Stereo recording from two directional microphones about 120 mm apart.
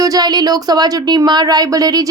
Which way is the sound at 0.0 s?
30° right (ahead or behind).